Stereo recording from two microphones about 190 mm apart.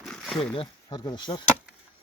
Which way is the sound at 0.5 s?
25° left (ahead or behind).